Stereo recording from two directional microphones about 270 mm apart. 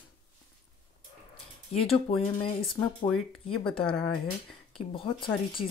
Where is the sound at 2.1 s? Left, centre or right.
Left.